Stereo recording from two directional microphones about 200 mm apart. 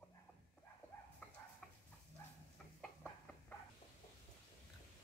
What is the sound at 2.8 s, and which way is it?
Chicken, 5° left (ahead or behind).